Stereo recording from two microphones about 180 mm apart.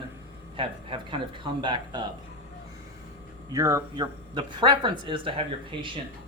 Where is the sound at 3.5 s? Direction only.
15° right (ahead or behind).